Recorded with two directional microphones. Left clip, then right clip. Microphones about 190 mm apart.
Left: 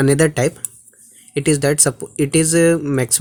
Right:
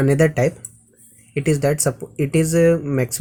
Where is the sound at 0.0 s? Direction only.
45° left (ahead or behind).